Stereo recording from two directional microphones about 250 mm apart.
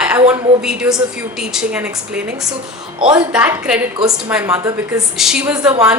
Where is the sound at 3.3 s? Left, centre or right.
Centre.